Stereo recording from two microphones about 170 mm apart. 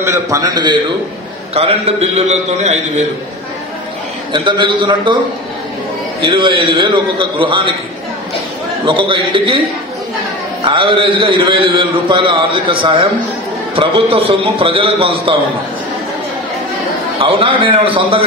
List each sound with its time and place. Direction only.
0.0 s a man's voice: 15° right (ahead or behind)
1.5 s a man's voice: 35° right (ahead or behind)
4.3 s a man's voice: 25° right (ahead or behind)
6.2 s a man's voice: 30° right (ahead or behind)
8.8 s a man's voice: 30° right (ahead or behind)
10.6 s a man's voice: 30° right (ahead or behind)
17.2 s a man's voice: 30° right (ahead or behind)